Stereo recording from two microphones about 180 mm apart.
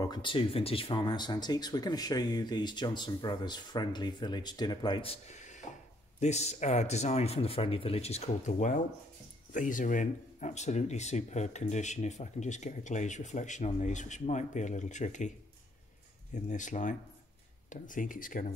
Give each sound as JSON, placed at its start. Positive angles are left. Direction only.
{"t": 0.0, "sound": "speech", "side_deg": 25}
{"t": 16.4, "sound": "speech", "side_deg": 45}